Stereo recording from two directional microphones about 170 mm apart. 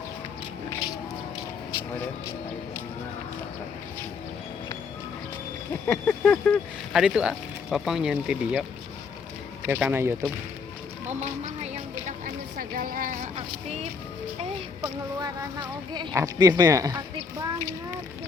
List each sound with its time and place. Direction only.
0.7 s music: 20° left (ahead or behind)
5.8 s speech: 5° left (ahead or behind)
7.0 s speech: 5° right (ahead or behind)
9.6 s a man's voice: 10° right (ahead or behind)
11.1 s a sound: 40° right (ahead or behind)
14.8 s speech: 20° right (ahead or behind)